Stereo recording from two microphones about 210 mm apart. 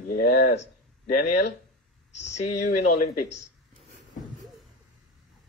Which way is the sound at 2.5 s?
35° left (ahead or behind).